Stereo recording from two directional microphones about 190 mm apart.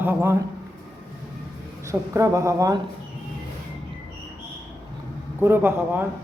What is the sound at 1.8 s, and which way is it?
Speech, 15° right (ahead or behind).